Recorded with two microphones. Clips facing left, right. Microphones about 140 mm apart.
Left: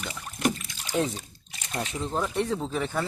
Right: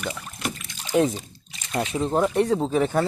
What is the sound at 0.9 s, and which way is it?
Speech, 10° right (ahead or behind).